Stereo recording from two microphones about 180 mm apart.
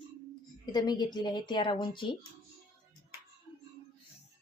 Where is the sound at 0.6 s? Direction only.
25° left (ahead or behind).